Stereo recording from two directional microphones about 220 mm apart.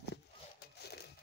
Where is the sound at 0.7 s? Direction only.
50° left (ahead or behind).